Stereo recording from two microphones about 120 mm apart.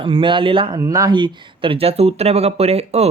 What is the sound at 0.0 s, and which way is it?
Speech, 45° right (ahead or behind).